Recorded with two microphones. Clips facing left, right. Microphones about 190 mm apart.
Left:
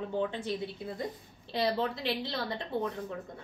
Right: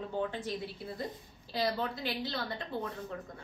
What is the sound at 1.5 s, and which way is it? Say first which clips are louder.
Speech: left 3 dB; 30° left (ahead or behind).